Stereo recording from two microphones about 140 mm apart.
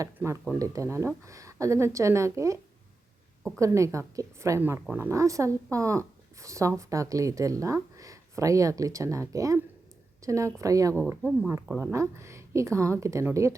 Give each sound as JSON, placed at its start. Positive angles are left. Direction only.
{"t": 0.0, "sound": "a woman's voice", "side_deg": -20}
{"t": 3.6, "sound": "a woman's voice", "side_deg": -20}